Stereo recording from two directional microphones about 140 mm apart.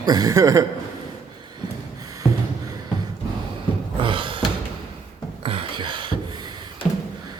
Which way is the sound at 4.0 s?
40° right (ahead or behind).